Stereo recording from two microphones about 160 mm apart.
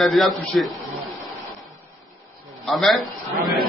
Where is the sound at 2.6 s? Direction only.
Centre (ahead or behind).